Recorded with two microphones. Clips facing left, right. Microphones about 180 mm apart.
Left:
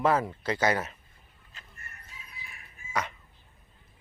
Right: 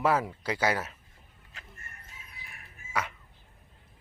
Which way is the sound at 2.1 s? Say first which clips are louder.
Left 2 dB; 50° right (ahead or behind).